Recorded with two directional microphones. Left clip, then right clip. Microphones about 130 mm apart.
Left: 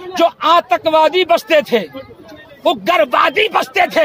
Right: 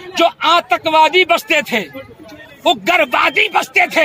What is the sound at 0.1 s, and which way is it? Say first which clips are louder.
Speech: left 1 dB; 40° left (ahead or behind).